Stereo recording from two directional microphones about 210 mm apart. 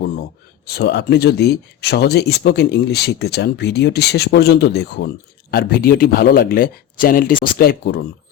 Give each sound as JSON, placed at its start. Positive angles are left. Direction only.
{"t": 0.8, "sound": "speech", "side_deg": 50}